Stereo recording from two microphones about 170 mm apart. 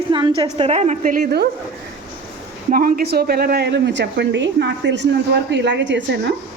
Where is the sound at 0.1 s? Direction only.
25° right (ahead or behind); by 1.5 s 65° right (ahead or behind).